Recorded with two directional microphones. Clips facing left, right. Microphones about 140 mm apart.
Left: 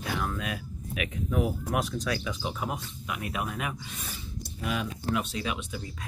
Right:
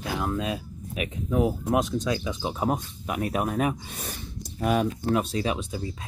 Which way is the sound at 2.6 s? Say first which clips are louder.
Right 7 dB; 40° right (ahead or behind).